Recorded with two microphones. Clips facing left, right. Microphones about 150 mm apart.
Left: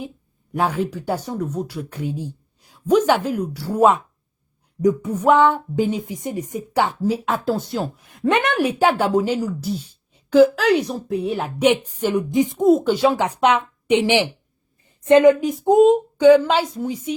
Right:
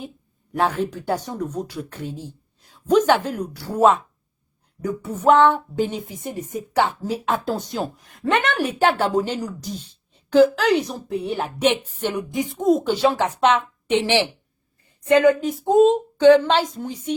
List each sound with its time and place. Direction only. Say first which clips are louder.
0.5 s a woman's voice: even; 10° left (ahead or behind)
7.3 s speech: left 2 dB; 5° left (ahead or behind)
8.2 s a woman's voice: left 3 dB; 20° left (ahead or behind); by 11.4 s centre (ahead or behind)
11.4 s a woman's voice: left 4 dB; 10° left (ahead or behind)
12.5 s a woman's voice: left 1 dB; 5° left (ahead or behind)